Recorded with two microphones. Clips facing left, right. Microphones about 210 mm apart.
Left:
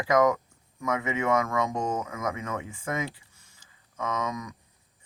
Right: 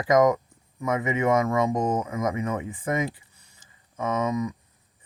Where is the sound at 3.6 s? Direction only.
10° right (ahead or behind).